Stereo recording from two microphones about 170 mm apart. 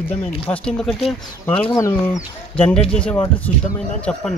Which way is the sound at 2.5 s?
5° left (ahead or behind).